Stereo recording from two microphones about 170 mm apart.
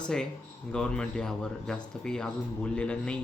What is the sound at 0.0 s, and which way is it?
Speech, 5° left (ahead or behind).